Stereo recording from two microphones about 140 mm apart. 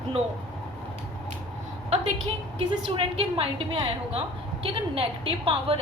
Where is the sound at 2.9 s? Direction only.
45° right (ahead or behind).